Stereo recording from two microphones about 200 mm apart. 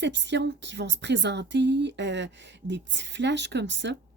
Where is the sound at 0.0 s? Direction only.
60° right (ahead or behind).